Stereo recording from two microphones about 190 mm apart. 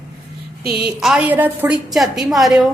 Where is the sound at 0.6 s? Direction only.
55° right (ahead or behind).